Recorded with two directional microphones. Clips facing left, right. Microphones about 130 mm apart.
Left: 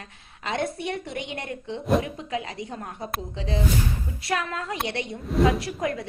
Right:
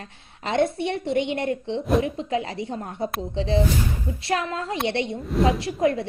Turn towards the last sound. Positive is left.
turn(degrees=-30)  # may be behind; listen again after turning